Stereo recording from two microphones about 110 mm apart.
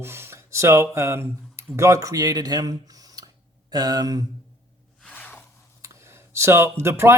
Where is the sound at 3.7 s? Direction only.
35° right (ahead or behind).